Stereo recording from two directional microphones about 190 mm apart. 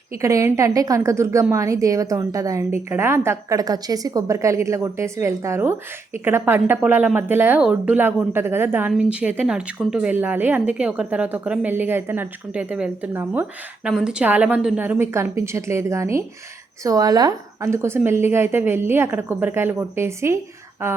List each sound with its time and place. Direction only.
0.2 s a woman's voice: 15° right (ahead or behind)